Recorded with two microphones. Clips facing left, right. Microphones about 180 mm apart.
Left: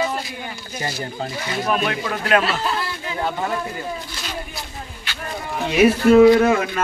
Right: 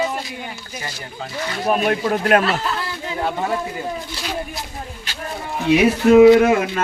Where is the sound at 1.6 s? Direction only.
40° right (ahead or behind).